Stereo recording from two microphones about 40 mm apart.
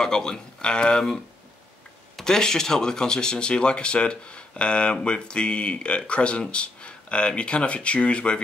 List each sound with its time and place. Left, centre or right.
0.0 s speech: centre
2.2 s speech: centre